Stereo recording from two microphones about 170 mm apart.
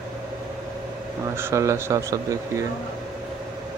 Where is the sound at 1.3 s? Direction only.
15° right (ahead or behind).